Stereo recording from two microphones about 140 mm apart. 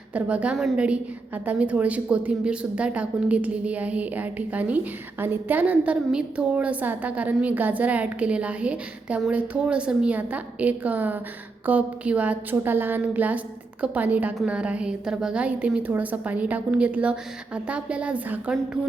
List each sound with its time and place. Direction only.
0.1 s a woman's voice: 10° right (ahead or behind)